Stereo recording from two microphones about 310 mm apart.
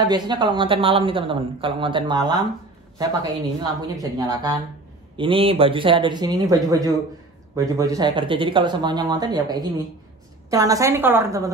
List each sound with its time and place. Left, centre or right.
0.0 s speech: centre